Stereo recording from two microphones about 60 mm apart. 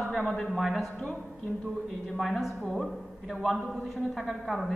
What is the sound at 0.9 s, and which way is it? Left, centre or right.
Speech, centre.